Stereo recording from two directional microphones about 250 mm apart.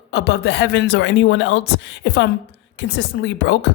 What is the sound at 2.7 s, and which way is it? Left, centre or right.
Speech, left.